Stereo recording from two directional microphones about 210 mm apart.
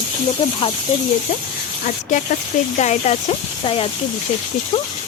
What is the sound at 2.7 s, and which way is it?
Speech, 35° left (ahead or behind).